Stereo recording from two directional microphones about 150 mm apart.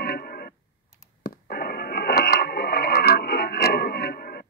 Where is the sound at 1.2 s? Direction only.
90° left.